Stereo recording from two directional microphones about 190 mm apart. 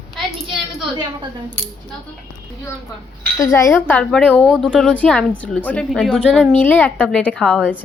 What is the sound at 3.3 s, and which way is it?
A woman's voice, 15° left (ahead or behind).